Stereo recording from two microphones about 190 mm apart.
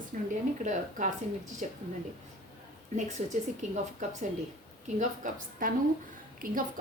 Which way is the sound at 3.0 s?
40° right (ahead or behind).